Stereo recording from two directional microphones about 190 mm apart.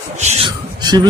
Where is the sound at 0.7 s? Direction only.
20° right (ahead or behind).